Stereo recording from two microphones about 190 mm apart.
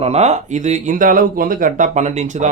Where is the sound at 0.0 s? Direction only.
35° right (ahead or behind).